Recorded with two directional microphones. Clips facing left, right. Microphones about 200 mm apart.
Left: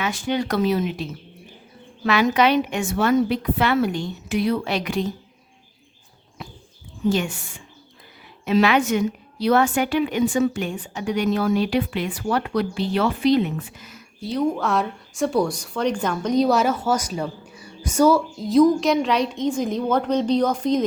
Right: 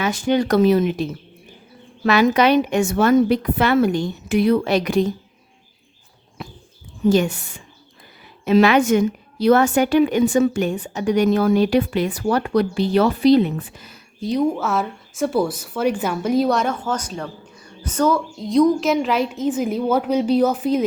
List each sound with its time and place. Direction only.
0.0 s a woman's voice: 45° right (ahead or behind)
2.0 s a woman's voice: 40° right (ahead or behind)
8.4 s a woman's voice: 45° right (ahead or behind)
14.2 s speech: 15° right (ahead or behind)
14.5 s a woman's voice: 5° right (ahead or behind)